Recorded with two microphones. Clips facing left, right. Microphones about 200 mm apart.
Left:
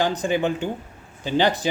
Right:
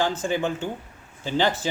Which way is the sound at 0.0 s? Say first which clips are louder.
Left 3 dB; 15° left (ahead or behind).